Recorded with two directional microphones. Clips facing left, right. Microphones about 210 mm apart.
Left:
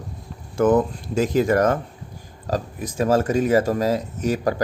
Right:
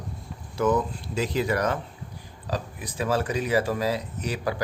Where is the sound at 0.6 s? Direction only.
50° left (ahead or behind).